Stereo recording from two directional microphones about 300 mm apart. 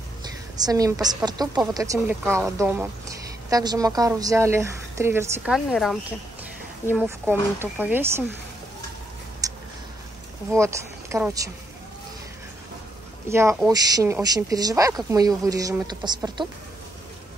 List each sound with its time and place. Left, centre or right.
0.6 s a woman's voice: centre
10.6 s speech: centre
13.3 s a woman's voice: centre